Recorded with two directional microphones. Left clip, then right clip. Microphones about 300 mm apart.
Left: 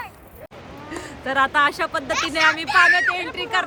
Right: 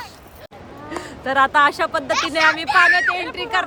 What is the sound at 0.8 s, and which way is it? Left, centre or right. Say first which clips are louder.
Speech: right 3 dB; centre.